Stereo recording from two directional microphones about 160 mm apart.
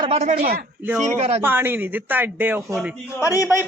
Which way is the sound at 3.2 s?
20° left (ahead or behind).